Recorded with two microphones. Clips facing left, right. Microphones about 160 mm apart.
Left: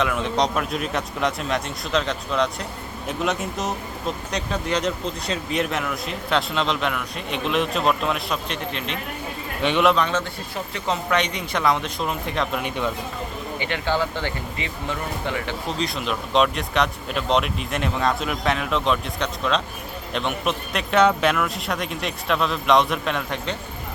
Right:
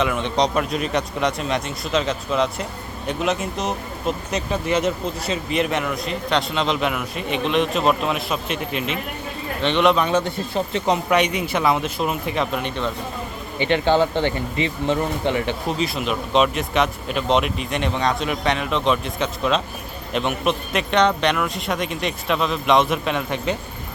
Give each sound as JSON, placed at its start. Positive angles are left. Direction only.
{"t": 0.0, "sound": "speech", "side_deg": 0}
{"t": 9.6, "sound": "a man's voice", "side_deg": 10}
{"t": 9.9, "sound": "a man's voice", "side_deg": -10}
{"t": 12.6, "sound": "a man's voice", "side_deg": 10}
{"t": 13.6, "sound": "speech", "side_deg": -25}
{"t": 15.8, "sound": "speech", "side_deg": 0}